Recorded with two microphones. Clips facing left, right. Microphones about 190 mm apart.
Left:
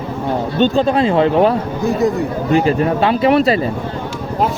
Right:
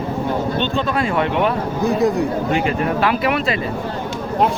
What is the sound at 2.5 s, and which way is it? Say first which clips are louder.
Speech: left 5 dB; 35° left (ahead or behind).